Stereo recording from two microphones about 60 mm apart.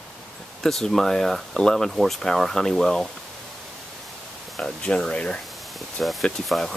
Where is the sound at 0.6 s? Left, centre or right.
Centre.